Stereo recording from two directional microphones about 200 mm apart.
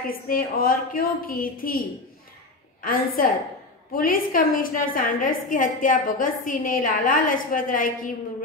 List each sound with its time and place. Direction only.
0.1 s a woman's voice: 45° left (ahead or behind)
2.8 s a woman's voice: 45° left (ahead or behind)